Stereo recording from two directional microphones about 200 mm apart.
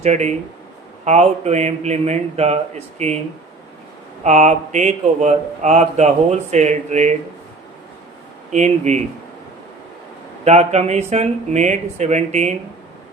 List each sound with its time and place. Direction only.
0.0 s speech: 35° right (ahead or behind)
4.2 s speech: 35° right (ahead or behind)
8.5 s speech: 35° right (ahead or behind)
10.4 s speech: 35° right (ahead or behind)